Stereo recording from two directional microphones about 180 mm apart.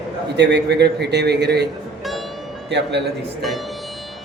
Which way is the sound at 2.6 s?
75° right (ahead or behind).